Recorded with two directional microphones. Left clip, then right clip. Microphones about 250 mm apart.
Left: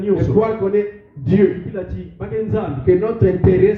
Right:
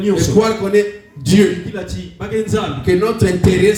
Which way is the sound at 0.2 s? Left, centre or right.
Right.